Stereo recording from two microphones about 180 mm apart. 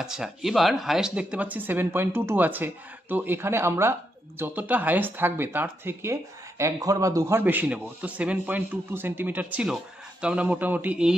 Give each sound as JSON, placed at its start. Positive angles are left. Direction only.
{"t": 0.0, "sound": "speech", "side_deg": -5}